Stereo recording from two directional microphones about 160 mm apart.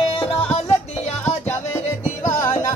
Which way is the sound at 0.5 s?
45° left (ahead or behind).